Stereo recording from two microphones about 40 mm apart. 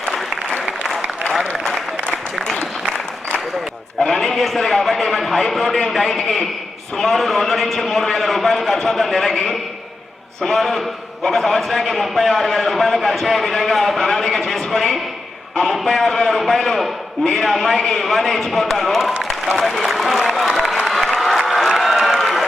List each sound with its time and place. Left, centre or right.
1.3 s applause: centre
4.2 s a man's voice: centre
14.0 s a man's voice: centre
17.2 s a man's voice: centre
20.8 s applause: centre